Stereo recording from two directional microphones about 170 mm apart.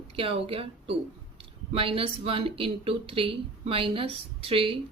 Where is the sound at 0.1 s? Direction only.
35° right (ahead or behind).